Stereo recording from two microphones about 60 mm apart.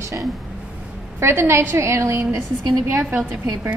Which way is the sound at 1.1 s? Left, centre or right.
Right.